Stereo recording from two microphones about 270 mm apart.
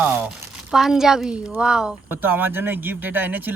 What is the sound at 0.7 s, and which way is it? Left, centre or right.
Speech, centre.